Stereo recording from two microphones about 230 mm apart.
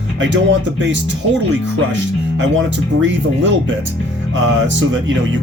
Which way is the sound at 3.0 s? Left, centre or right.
Right.